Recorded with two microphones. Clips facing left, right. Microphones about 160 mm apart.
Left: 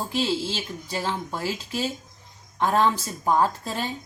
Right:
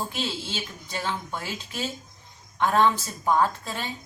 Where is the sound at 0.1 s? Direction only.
30° left (ahead or behind).